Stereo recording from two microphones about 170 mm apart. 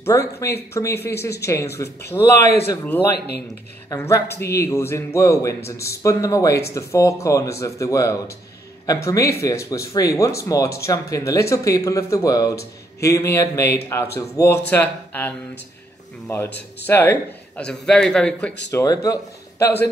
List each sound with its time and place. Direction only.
0.0 s speech: 15° left (ahead or behind)
18.7 s speech: 20° left (ahead or behind)